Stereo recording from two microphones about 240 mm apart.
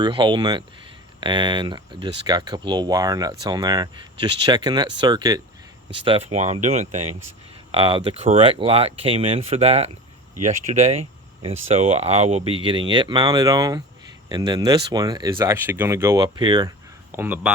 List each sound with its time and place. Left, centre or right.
0.0 s speech: centre
7.1 s speech: right
7.7 s speech: right